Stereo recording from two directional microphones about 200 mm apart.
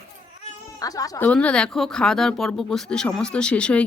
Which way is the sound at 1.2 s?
5° left (ahead or behind).